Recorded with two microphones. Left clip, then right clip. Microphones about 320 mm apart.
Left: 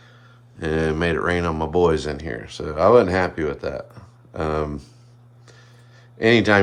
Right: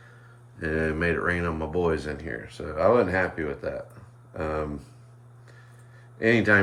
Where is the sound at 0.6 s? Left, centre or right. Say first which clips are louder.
Left 4 dB; centre.